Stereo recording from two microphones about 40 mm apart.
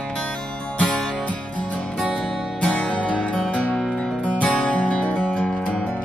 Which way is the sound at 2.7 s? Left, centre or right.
Left.